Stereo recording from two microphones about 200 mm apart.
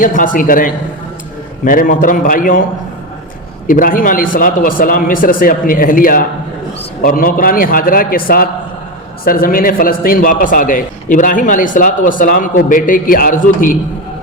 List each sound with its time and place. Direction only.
0.0 s a man's voice: 40° left (ahead or behind)
3.7 s a man's voice: 45° left (ahead or behind)